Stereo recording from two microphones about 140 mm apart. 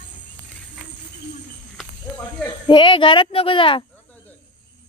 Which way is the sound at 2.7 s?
35° left (ahead or behind).